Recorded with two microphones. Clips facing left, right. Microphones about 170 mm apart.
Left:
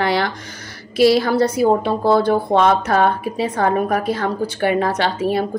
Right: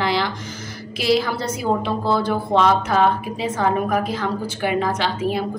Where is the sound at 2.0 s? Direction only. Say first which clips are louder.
Left 7 dB; 60° left (ahead or behind).